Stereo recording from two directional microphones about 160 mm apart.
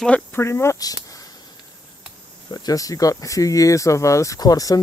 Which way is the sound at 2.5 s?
25° left (ahead or behind).